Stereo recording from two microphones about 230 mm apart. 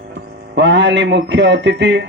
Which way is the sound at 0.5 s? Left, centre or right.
Right.